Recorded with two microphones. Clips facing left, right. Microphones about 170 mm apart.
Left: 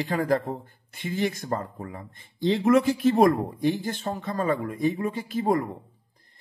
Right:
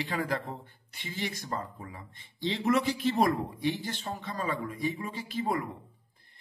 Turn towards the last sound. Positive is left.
turn(degrees=45)  # may be behind; listen again after turning